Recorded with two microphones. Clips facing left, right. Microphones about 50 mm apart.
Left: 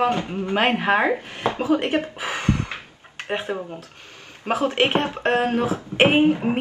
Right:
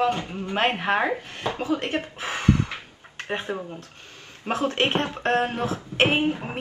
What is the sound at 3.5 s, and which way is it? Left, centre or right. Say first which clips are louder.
Speech: left 2 dB; centre.